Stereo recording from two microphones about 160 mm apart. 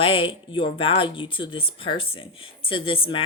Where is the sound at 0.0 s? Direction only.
35° left (ahead or behind).